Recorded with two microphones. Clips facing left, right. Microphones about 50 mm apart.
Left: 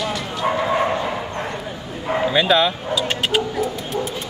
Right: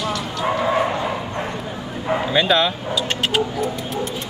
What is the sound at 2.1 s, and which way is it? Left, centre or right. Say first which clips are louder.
Dog: left 1 dB; centre.